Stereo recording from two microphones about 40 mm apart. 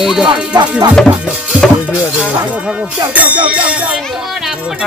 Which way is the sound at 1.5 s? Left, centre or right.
Right.